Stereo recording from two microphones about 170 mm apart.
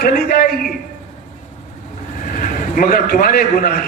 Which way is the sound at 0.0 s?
60° left (ahead or behind).